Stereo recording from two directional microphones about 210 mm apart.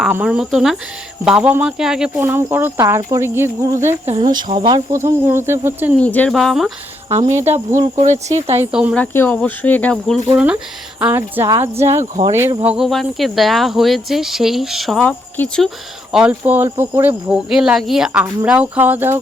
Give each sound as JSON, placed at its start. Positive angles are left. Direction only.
{"t": 0.0, "sound": "speech", "side_deg": -5}
{"t": 4.1, "sound": "speech", "side_deg": -30}
{"t": 4.5, "sound": "speech", "side_deg": -20}
{"t": 6.0, "sound": "speech", "side_deg": 5}
{"t": 7.1, "sound": "speech", "side_deg": -35}
{"t": 8.5, "sound": "speech", "side_deg": -5}
{"t": 9.1, "sound": "speech", "side_deg": 10}
{"t": 10.3, "sound": "speech", "side_deg": -5}
{"t": 16.4, "sound": "speech", "side_deg": -15}